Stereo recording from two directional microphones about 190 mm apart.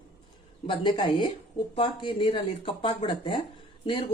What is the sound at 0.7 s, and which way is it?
A woman's voice, 25° left (ahead or behind).